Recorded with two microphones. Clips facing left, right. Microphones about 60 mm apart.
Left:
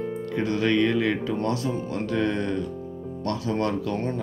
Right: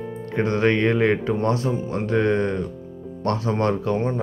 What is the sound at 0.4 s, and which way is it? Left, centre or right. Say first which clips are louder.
Speech: right 3 dB; right.